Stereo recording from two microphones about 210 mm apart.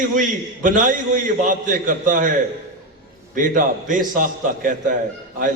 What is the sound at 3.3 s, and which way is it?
A man's voice, 40° right (ahead or behind).